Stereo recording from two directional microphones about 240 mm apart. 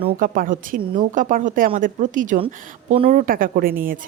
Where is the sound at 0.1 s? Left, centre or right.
Right.